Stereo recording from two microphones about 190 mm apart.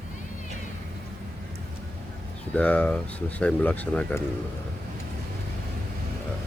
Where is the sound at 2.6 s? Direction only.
5° left (ahead or behind).